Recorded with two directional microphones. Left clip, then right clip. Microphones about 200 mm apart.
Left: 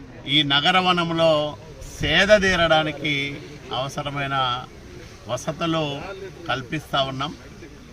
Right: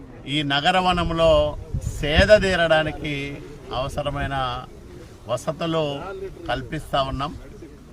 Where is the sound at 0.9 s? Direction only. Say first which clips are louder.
Right 1 dB; 30° right (ahead or behind).